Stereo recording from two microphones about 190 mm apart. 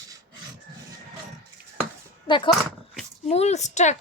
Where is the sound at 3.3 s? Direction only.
35° left (ahead or behind).